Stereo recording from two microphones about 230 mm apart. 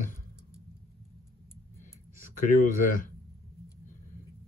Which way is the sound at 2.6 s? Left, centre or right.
Left.